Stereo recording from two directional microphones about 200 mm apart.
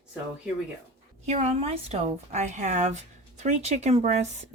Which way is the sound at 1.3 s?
30° right (ahead or behind).